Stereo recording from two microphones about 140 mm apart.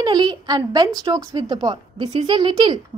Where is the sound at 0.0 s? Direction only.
30° right (ahead or behind).